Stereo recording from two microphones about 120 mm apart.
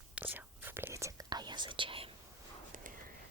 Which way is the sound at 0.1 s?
15° right (ahead or behind).